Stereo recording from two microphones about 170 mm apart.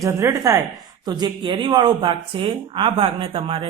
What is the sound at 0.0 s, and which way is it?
A woman's voice, 20° right (ahead or behind).